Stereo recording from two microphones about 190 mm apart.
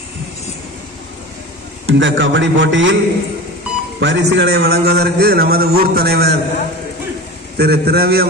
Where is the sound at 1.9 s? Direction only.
75° right (ahead or behind).